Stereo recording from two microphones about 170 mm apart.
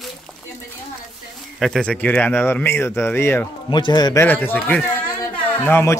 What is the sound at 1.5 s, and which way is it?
Speech, centre (ahead or behind).